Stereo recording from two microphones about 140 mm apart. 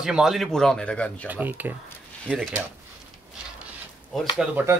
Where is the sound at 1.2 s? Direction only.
10° right (ahead or behind).